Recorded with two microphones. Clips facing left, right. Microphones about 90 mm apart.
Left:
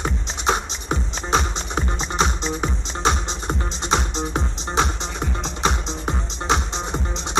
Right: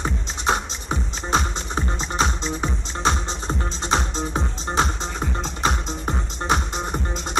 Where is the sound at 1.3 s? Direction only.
20° left (ahead or behind).